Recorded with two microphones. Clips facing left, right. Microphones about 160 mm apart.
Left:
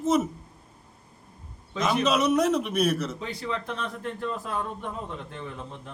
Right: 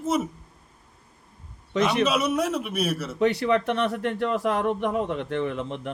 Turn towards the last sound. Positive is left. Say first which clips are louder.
# right 9 dB
turn(degrees=-75)  # may be behind; listen again after turning